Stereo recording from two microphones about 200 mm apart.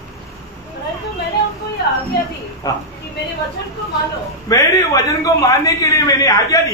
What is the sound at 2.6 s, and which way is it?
Speech, 20° left (ahead or behind).